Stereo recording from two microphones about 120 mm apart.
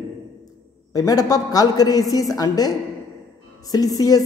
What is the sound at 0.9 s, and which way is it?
A man's voice, 30° left (ahead or behind).